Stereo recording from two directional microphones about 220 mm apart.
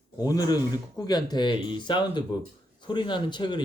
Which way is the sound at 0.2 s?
15° left (ahead or behind).